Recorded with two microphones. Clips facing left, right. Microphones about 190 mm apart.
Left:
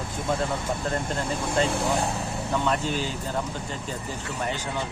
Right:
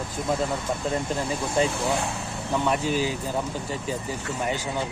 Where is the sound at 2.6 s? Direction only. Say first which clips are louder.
Right 5 dB; 10° right (ahead or behind).